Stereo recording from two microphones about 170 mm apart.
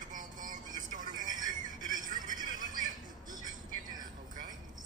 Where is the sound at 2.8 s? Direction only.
25° right (ahead or behind).